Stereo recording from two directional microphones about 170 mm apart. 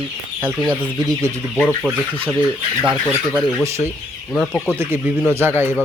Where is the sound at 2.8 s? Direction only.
10° right (ahead or behind).